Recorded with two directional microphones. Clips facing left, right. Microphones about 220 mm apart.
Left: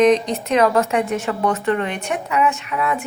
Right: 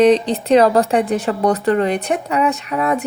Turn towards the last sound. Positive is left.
turn(degrees=-40)  # may be behind; listen again after turning